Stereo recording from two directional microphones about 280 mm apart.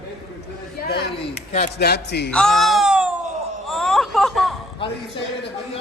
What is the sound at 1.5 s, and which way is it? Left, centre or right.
Speech, left.